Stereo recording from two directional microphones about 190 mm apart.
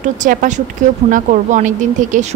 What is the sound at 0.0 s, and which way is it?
A woman's voice, 45° right (ahead or behind).